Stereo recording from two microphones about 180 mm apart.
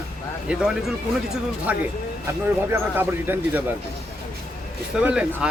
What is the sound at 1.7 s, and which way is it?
Speech, 10° right (ahead or behind).